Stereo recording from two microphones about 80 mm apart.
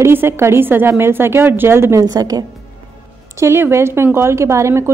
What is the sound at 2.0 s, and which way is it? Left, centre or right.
Speech, right.